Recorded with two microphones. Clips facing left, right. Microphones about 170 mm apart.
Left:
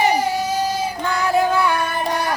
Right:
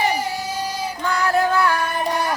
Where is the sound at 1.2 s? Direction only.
15° left (ahead or behind).